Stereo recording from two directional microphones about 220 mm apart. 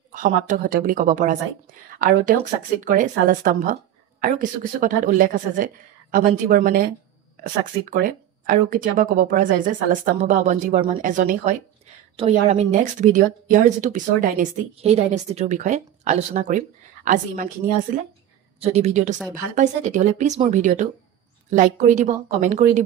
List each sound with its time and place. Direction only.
0.1 s a woman's voice: 35° right (ahead or behind)
18.6 s a woman's voice: 30° right (ahead or behind)